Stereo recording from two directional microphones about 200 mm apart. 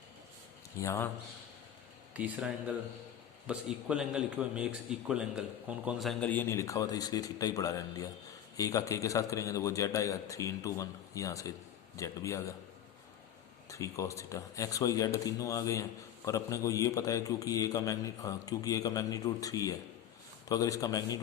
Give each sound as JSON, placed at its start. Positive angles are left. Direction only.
{"t": 0.8, "sound": "speech", "side_deg": 10}
{"t": 2.1, "sound": "a man's voice", "side_deg": -5}
{"t": 13.7, "sound": "speech", "side_deg": 15}